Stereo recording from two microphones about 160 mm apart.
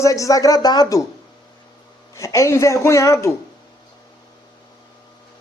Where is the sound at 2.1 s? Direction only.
20° left (ahead or behind).